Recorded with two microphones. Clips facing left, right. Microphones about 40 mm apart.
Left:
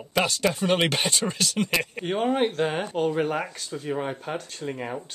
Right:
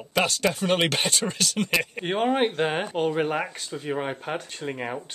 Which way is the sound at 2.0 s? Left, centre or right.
Right.